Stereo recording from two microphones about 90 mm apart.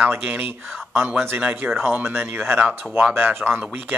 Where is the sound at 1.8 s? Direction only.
20° right (ahead or behind).